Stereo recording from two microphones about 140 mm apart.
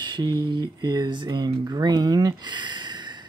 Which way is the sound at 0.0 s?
30° right (ahead or behind).